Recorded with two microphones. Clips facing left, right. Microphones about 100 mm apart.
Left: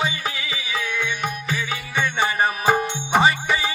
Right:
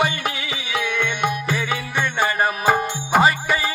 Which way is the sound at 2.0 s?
Centre (ahead or behind).